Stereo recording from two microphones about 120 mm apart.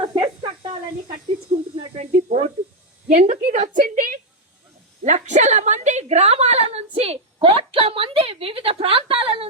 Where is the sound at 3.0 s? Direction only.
90° right.